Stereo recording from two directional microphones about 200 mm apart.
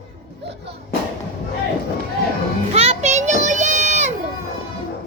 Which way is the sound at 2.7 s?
30° right (ahead or behind).